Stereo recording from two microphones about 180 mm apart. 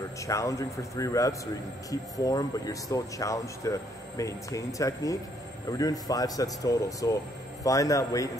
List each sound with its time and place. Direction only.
0.3 s speech: 15° left (ahead or behind)